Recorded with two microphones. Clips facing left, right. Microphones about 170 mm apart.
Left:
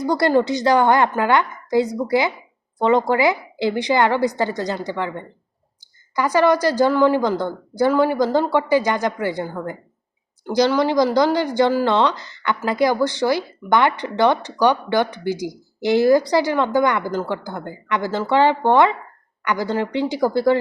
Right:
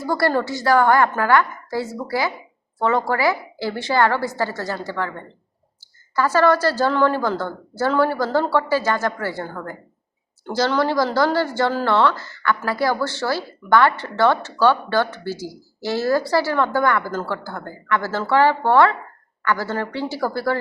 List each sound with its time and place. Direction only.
0.0 s a woman's voice: 20° left (ahead or behind)